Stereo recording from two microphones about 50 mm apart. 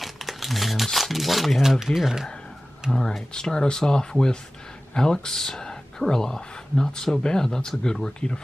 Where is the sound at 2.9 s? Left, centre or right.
Centre.